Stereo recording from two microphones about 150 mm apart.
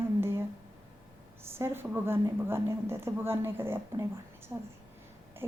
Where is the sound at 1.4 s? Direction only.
15° right (ahead or behind).